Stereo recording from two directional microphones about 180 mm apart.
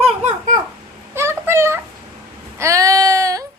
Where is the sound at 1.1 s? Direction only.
15° right (ahead or behind).